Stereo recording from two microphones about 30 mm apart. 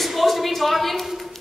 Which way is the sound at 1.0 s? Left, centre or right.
Centre.